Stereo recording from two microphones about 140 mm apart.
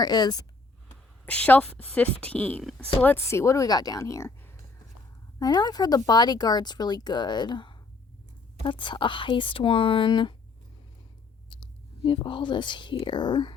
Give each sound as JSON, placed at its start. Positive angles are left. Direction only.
{"t": 0.0, "sound": "speech", "side_deg": 30}
{"t": 1.2, "sound": "a woman's voice", "side_deg": 10}
{"t": 3.0, "sound": "speech", "side_deg": 15}
{"t": 5.4, "sound": "speech", "side_deg": 30}
{"t": 11.4, "sound": "speech", "side_deg": 35}